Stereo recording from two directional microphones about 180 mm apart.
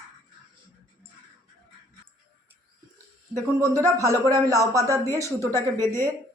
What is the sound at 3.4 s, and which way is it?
Speech, 20° right (ahead or behind).